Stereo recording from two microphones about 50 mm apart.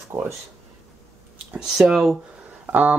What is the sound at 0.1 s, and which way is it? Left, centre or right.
Speech, right.